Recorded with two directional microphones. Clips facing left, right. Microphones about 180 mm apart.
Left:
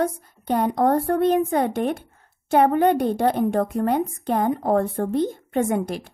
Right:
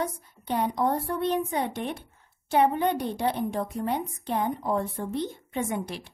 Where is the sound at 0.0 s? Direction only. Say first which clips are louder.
Left 7 dB; 50° left (ahead or behind).